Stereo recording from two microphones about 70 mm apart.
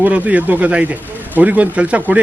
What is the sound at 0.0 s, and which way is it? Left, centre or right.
Speech, right.